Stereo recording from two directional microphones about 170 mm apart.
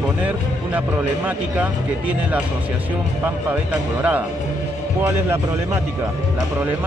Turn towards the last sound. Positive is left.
turn(degrees=-15)  # may be behind; listen again after turning